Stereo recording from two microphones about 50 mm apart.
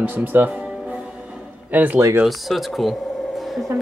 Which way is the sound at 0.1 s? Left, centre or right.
Right.